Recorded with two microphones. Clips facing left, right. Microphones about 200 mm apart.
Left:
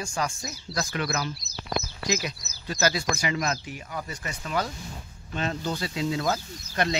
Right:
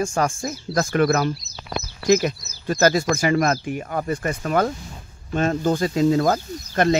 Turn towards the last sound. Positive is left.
turn(degrees=-45)  # may be behind; listen again after turning